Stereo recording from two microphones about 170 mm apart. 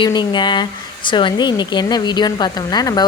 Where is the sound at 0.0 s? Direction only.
25° left (ahead or behind).